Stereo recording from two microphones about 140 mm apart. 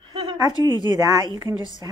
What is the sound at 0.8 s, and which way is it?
Speech, 30° right (ahead or behind).